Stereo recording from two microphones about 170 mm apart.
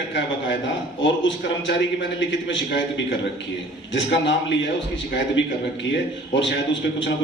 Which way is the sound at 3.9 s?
90° left.